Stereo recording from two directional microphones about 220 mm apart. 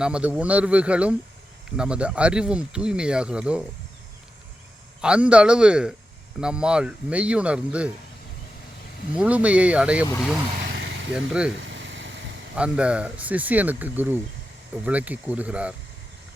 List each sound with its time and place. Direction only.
0.0 s speech: 5° right (ahead or behind)
4.9 s speech: 5° right (ahead or behind)
9.1 s speech: 5° right (ahead or behind)
10.7 s vehicle: 55° right (ahead or behind)
11.1 s speech: 5° right (ahead or behind)
11.5 s a sound: 55° right (ahead or behind)
12.5 s speech: 5° right (ahead or behind)